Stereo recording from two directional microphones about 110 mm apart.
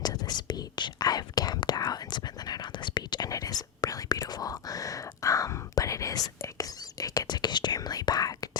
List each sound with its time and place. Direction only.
0.0 s whispering: 40° left (ahead or behind)